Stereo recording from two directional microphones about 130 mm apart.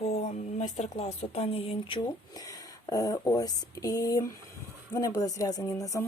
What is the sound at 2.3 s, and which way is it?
Speech, 25° left (ahead or behind).